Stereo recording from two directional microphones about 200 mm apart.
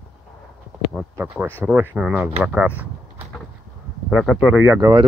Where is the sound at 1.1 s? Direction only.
10° right (ahead or behind).